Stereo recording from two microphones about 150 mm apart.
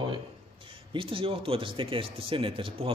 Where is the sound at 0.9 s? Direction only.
35° right (ahead or behind).